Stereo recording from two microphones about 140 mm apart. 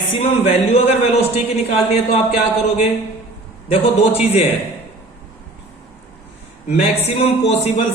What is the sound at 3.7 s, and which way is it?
Speech, 45° left (ahead or behind).